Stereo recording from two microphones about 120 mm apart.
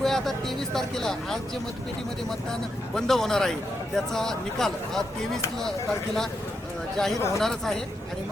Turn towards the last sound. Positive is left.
turn(degrees=5)  # may be behind; listen again after turning